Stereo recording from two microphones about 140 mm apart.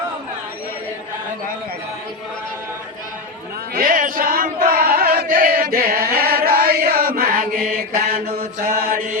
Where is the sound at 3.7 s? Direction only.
90° right.